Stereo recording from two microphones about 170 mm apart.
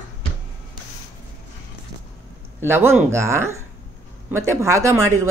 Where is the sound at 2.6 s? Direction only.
15° right (ahead or behind).